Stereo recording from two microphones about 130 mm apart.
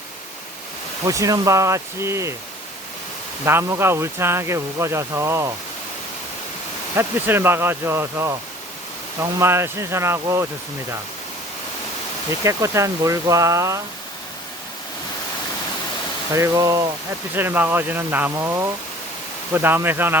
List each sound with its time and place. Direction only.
1.0 s speech: 25° right (ahead or behind)
3.4 s speech: 20° right (ahead or behind)
6.9 s speech: 20° right (ahead or behind)
12.3 s speech: 25° right (ahead or behind)
16.3 s speech: 25° right (ahead or behind)